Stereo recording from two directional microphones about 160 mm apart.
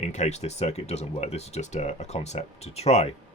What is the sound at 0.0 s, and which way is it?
Speech, 45° left (ahead or behind).